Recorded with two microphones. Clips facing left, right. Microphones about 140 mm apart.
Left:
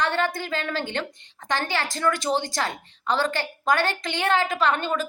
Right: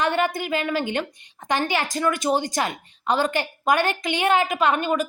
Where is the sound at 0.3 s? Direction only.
15° right (ahead or behind).